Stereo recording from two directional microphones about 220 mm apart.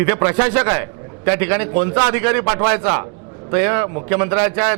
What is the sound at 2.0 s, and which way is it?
A man's voice, 15° right (ahead or behind).